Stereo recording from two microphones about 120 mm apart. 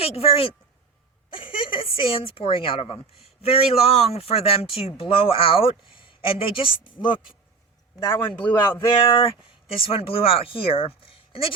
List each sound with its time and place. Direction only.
0.0 s speech: 55° left (ahead or behind)
8.4 s speech: 15° left (ahead or behind)
9.0 s speech: 40° left (ahead or behind)